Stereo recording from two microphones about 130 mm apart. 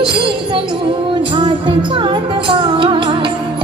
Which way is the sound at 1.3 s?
40° right (ahead or behind).